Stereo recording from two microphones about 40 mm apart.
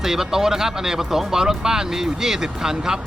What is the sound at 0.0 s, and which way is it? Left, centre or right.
Speech, centre.